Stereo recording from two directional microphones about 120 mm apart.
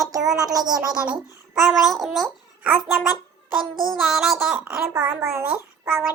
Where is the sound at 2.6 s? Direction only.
15° right (ahead or behind).